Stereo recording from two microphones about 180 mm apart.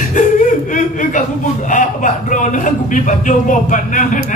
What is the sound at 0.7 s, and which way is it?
A man's voice, 45° left (ahead or behind).